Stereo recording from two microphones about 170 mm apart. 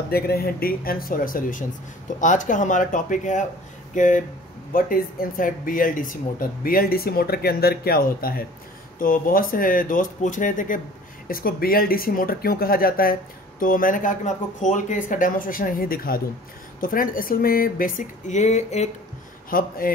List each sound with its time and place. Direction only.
0.1 s speech: 65° left (ahead or behind); by 18.9 s 45° left (ahead or behind)
19.5 s speech: 55° left (ahead or behind)